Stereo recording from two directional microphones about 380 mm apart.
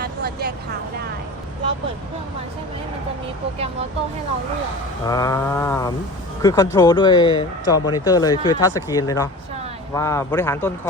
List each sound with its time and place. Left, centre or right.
0.0 s vehicle: right
5.0 s speech: centre